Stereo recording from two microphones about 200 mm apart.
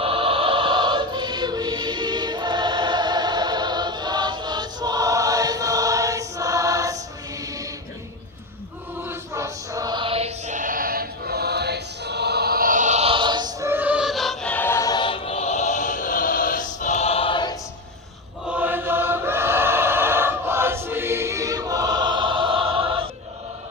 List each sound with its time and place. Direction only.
0.0 s choir: 25° right (ahead or behind)
9.0 s music: 15° right (ahead or behind); by 17.6 s 20° left (ahead or behind)
18.4 s chant: 10° right (ahead or behind); by 23.0 s 25° right (ahead or behind)